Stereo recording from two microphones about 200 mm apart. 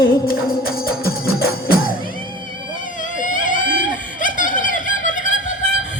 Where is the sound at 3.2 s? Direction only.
40° left (ahead or behind).